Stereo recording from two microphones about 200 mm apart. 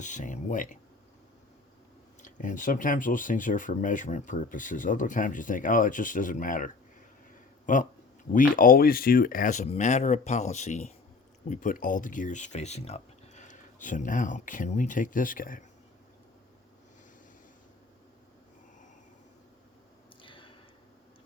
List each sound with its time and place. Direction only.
0.0 s speech: 40° left (ahead or behind)
2.2 s speech: 40° left (ahead or behind)
7.7 s speech: 40° left (ahead or behind)
20.2 s a sound: 25° left (ahead or behind)